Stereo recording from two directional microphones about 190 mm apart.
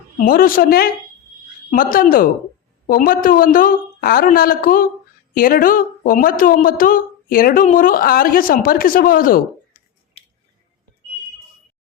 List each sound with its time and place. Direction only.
0.2 s a woman's voice: 50° left (ahead or behind)